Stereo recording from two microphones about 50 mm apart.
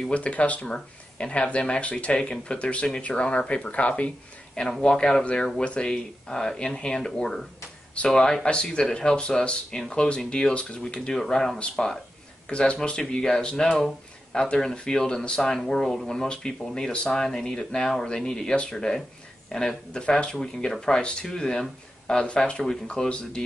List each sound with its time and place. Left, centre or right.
0.1 s speech: left
4.8 s speech: centre
7.9 s speech: left